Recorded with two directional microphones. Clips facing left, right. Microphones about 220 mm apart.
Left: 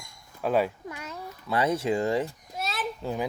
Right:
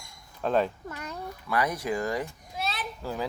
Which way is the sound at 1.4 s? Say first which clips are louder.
Left 3 dB; 25° left (ahead or behind).